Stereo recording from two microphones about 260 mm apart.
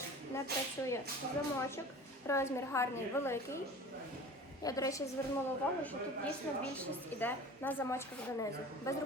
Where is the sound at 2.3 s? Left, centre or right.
Centre.